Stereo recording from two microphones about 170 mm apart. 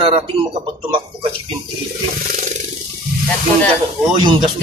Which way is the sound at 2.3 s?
45° right (ahead or behind).